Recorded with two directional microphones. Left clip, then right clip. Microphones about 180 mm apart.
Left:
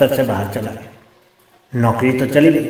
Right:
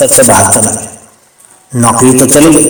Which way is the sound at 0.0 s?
25° right (ahead or behind).